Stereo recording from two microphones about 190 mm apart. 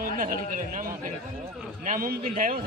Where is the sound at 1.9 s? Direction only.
45° right (ahead or behind).